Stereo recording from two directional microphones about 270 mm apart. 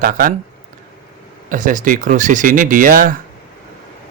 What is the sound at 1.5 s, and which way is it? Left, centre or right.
A man's voice, right.